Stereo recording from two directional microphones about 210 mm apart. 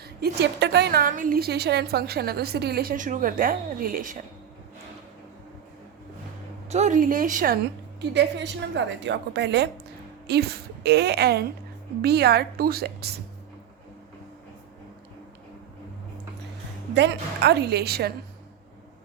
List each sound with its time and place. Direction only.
0.0 s a woman's voice: 50° right (ahead or behind)
6.7 s a woman's voice: 35° right (ahead or behind)
8.1 s a woman's voice: 55° right (ahead or behind)
16.9 s a woman's voice: 55° right (ahead or behind)